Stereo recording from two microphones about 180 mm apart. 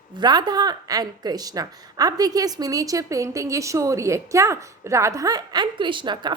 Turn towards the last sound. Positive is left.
turn(degrees=-25)  # may be behind; listen again after turning